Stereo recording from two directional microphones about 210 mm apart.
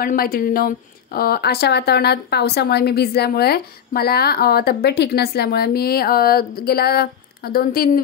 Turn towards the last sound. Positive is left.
turn(degrees=45)  # may be behind; listen again after turning